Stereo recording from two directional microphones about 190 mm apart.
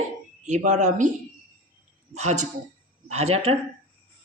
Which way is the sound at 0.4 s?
40° right (ahead or behind).